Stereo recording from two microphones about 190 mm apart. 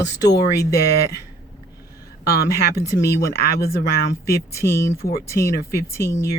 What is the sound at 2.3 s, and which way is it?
Speech, 55° left (ahead or behind).